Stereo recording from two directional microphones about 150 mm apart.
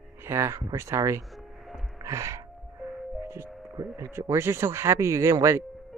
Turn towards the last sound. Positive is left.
turn(degrees=-20)  # may be behind; listen again after turning